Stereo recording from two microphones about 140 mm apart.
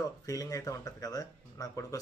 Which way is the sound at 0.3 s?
25° left (ahead or behind).